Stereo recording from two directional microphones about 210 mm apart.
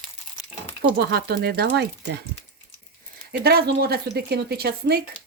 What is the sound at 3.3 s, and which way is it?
Speech, 50° right (ahead or behind).